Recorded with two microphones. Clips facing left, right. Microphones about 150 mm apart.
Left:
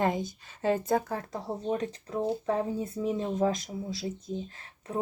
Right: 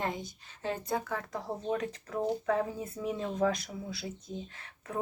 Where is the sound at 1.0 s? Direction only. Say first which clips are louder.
Left 2 dB; 35° left (ahead or behind).